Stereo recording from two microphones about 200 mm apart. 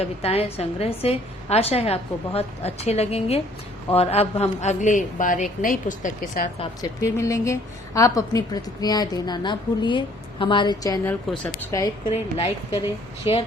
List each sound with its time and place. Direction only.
0.0 s a woman's voice: 30° left (ahead or behind)
7.0 s a woman's voice: 15° left (ahead or behind)
13.2 s a woman's voice: 25° left (ahead or behind)